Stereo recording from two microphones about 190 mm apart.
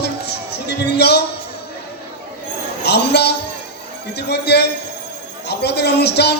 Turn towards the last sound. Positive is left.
turn(degrees=60)  # may be behind; listen again after turning